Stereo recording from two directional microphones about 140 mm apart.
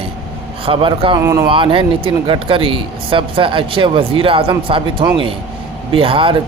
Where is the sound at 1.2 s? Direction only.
20° right (ahead or behind).